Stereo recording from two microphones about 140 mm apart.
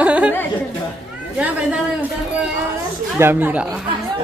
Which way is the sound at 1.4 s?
10° right (ahead or behind).